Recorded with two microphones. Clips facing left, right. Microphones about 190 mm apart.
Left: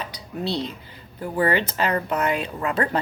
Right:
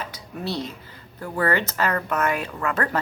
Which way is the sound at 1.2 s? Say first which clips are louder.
Left 2 dB; 20° left (ahead or behind).